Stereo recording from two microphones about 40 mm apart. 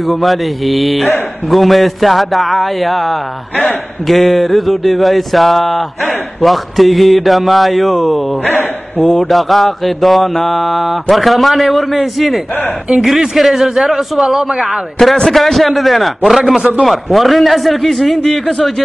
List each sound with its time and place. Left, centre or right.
0.1 s speech: centre
8.5 s a sound: left
9.3 s speech: centre
15.1 s speech: centre